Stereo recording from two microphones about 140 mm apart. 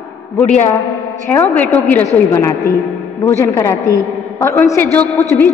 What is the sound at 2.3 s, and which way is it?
A woman's voice, 25° left (ahead or behind).